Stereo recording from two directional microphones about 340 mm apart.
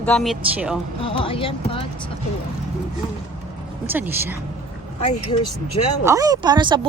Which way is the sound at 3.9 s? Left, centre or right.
Centre.